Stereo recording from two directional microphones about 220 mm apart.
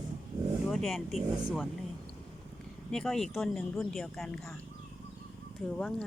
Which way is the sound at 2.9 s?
Centre (ahead or behind).